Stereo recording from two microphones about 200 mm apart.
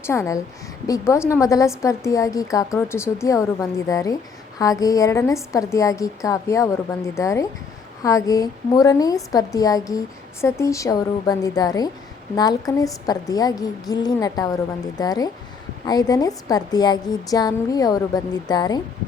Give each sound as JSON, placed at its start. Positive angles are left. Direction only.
{"t": 0.0, "sound": "a woman's voice", "side_deg": 15}